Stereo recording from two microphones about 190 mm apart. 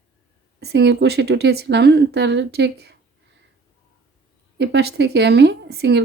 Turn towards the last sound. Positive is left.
turn(degrees=-55)  # may be behind; listen again after turning